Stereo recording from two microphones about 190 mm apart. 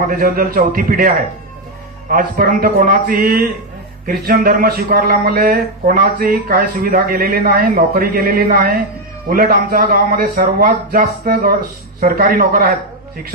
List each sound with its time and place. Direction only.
0.1 s a man's voice: 50° right (ahead or behind)